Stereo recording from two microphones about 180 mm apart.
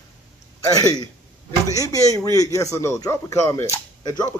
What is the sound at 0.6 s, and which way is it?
A man's voice, 20° left (ahead or behind).